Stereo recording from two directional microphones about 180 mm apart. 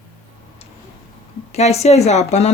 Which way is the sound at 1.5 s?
35° left (ahead or behind).